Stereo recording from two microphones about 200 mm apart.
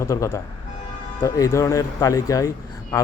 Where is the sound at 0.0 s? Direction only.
15° left (ahead or behind).